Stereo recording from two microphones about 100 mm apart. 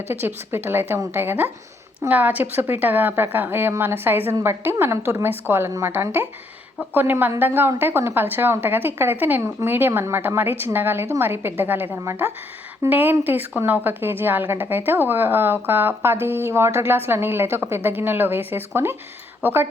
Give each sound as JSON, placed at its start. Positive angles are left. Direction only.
{"t": 0.1, "sound": "a woman's voice", "side_deg": -20}